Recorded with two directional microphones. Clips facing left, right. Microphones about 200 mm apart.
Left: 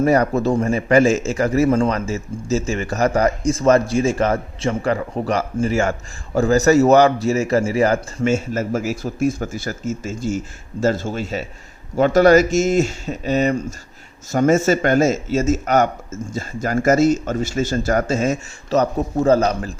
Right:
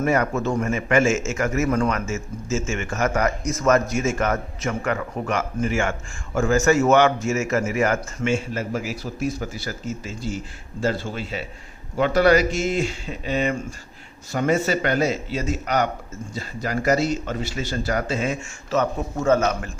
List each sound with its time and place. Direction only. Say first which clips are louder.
0.0 s a man's voice: left 5 dB; 35° left (ahead or behind)